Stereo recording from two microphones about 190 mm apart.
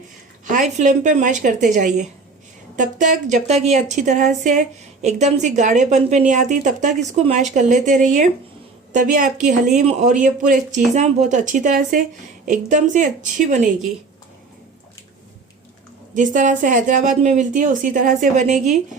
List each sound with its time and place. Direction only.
0.4 s a woman's voice: 40° right (ahead or behind)
16.1 s speech: 45° right (ahead or behind)